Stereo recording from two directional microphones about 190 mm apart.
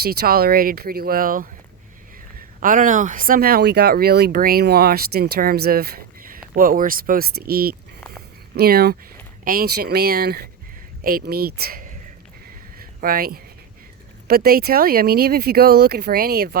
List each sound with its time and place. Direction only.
0.0 s speech: 55° right (ahead or behind)
2.6 s speech: 45° right (ahead or behind)
12.8 s a sound: 50° right (ahead or behind)
14.3 s speech: 55° right (ahead or behind)